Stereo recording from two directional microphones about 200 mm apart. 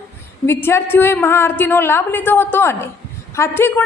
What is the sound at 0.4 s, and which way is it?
A woman's voice, 10° left (ahead or behind).